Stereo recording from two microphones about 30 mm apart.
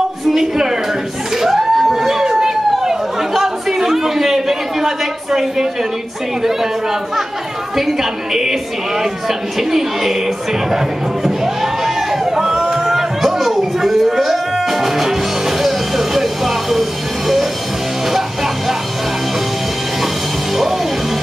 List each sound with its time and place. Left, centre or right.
0.3 s a woman's voice: centre
1.3 s a sound: centre
6.4 s a woman's voice: centre
11.2 s a sound: centre
13.2 s music: centre
18.1 s music: centre
20.5 s music: centre